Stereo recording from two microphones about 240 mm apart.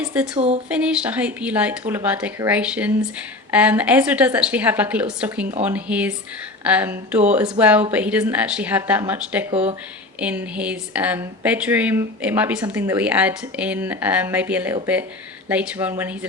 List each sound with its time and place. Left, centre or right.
0.0 s speech: centre
0.3 s speech: right
0.7 s speech: centre
9.5 s speech: right
10.2 s speech: centre